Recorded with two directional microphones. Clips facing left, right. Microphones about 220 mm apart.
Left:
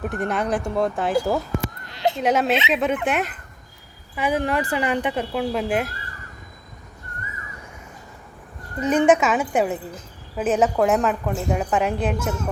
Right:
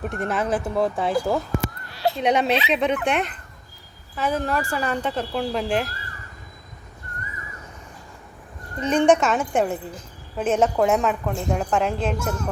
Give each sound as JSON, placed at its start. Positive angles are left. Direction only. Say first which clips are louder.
{"t": 0.0, "sound": "a woman's voice", "louder": "left 1 dB", "side_deg": 0}
{"t": 1.9, "sound": "a sound", "louder": "left 1 dB", "side_deg": 20}
{"t": 2.2, "sound": "a woman's voice", "louder": "even", "side_deg": 0}
{"t": 4.1, "sound": "speech", "louder": "left 2 dB", "side_deg": 15}
{"t": 8.8, "sound": "a woman's voice", "louder": "left 1 dB", "side_deg": 5}